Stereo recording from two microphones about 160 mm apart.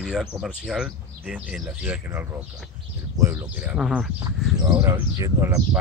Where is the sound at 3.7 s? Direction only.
5° right (ahead or behind).